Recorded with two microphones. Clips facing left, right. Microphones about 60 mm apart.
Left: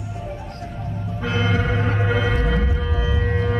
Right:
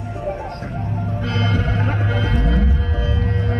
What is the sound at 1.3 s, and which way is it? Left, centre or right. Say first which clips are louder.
Music: left 2 dB; centre.